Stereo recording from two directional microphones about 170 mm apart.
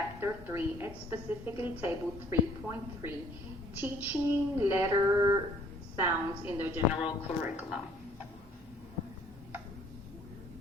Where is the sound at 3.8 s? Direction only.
10° right (ahead or behind).